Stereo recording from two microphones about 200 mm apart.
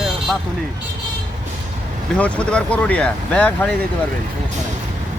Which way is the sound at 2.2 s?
5° left (ahead or behind).